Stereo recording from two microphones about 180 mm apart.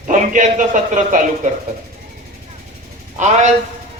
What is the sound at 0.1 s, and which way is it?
Speech, 45° right (ahead or behind).